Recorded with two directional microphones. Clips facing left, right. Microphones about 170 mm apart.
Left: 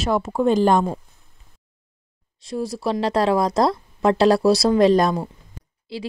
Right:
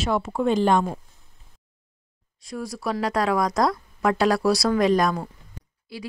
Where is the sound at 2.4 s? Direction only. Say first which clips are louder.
Left 5 dB; 25° left (ahead or behind).